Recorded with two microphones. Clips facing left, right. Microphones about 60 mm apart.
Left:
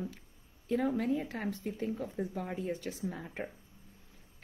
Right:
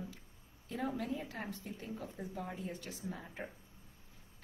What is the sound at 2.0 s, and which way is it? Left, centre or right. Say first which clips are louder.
Speech: left 6 dB; left.